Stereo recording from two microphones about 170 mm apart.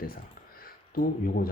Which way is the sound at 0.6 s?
60° left (ahead or behind).